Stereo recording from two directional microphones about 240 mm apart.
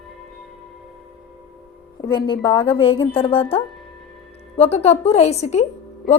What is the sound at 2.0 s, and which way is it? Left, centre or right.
A woman's voice, centre.